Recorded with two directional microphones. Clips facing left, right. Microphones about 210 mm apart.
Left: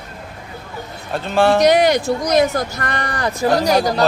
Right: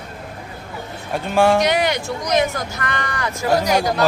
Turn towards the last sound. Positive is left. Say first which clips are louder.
# left 2 dB
turn(degrees=35)  # may be behind; listen again after turning